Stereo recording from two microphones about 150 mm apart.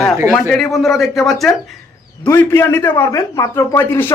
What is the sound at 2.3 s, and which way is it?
A man's voice, 15° left (ahead or behind).